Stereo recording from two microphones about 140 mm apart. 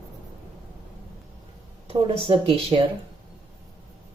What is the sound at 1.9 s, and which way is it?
Speech, 40° right (ahead or behind).